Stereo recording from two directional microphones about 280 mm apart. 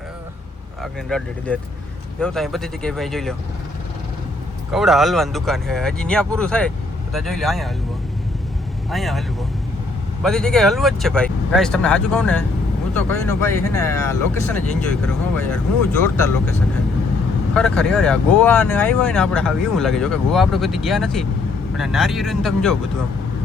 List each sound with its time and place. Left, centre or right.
0.8 s speech: centre
4.7 s speech: centre
8.9 s speech: centre
10.2 s speech: centre